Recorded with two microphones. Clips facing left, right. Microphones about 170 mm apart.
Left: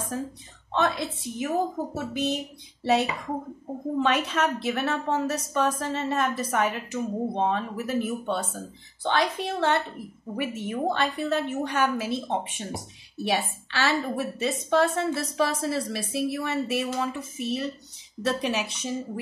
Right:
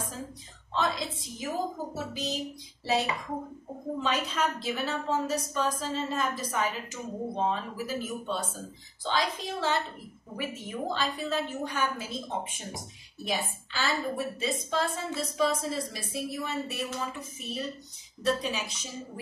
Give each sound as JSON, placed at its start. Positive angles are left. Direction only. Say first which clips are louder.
{"t": 0.1, "sound": "a woman's voice", "louder": "left 8 dB", "side_deg": 65}